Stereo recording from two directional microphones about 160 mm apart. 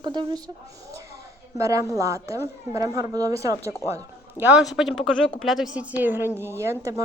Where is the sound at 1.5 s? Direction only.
20° right (ahead or behind).